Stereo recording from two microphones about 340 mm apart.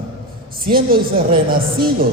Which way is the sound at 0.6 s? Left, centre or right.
Right.